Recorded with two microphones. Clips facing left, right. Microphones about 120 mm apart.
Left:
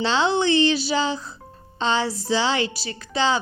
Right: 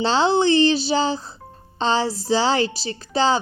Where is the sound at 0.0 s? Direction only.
35° right (ahead or behind).